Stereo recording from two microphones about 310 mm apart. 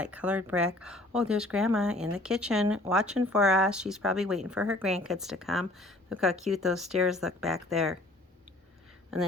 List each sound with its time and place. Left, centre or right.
0.0 s speech: centre